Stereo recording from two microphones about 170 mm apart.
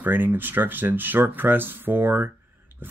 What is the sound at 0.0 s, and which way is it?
Speech, 10° right (ahead or behind).